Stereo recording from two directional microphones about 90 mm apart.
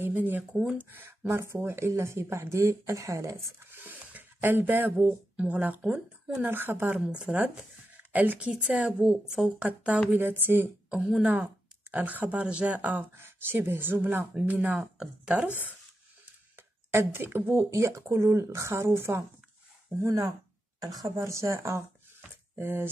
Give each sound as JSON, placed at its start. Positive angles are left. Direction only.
{"t": 0.3, "sound": "speech", "side_deg": -15}
{"t": 3.7, "sound": "speech", "side_deg": -20}
{"t": 6.4, "sound": "speech", "side_deg": -25}
{"t": 10.1, "sound": "speech", "side_deg": -25}
{"t": 10.9, "sound": "speech", "side_deg": -10}
{"t": 16.9, "sound": "speech", "side_deg": -25}